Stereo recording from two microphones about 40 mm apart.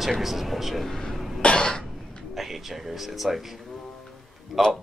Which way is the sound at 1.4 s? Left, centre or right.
Left.